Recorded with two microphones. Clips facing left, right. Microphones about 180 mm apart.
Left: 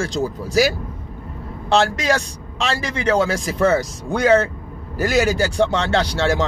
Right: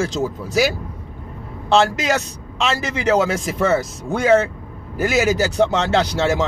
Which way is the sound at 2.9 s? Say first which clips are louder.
Even; 5° right (ahead or behind).